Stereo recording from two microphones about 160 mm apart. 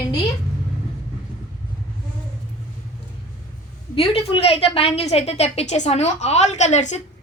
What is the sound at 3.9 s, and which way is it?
A woman's voice, 35° left (ahead or behind).